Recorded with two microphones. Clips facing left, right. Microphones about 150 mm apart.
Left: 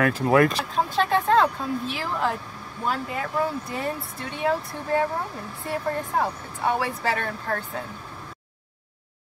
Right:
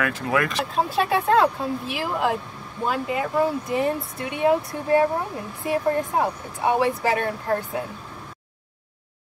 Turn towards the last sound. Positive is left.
turn(degrees=-15)  # may be behind; listen again after turning